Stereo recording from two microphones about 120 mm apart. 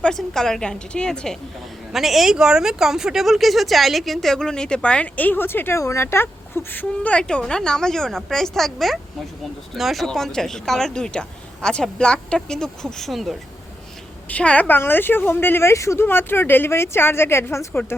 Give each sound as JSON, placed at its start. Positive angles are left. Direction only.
{"t": 0.0, "sound": "speech", "side_deg": 5}
{"t": 14.3, "sound": "a woman's voice", "side_deg": 10}